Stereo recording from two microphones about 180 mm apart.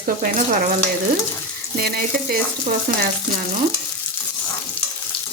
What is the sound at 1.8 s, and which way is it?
Speech, 60° right (ahead or behind).